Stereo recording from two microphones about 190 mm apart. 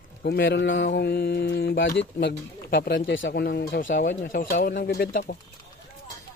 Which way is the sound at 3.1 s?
65° left (ahead or behind).